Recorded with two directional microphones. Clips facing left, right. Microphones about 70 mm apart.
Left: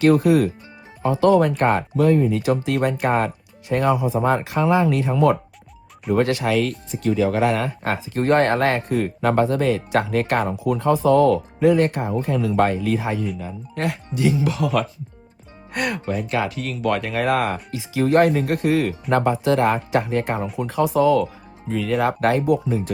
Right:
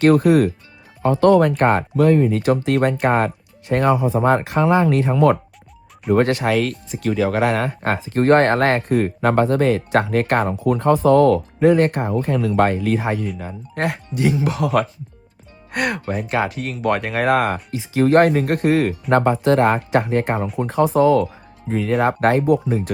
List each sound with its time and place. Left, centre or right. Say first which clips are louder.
0.0 s speech: right 2 dB; right
6.1 s speech: right 2 dB; right
15.7 s speech: right 2 dB; right
16.3 s speech: right 4 dB; right